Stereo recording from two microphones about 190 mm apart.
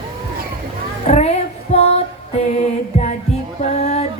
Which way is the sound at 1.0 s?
35° left (ahead or behind).